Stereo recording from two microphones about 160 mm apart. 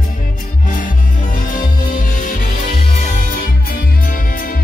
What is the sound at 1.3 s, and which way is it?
Music, 60° left (ahead or behind).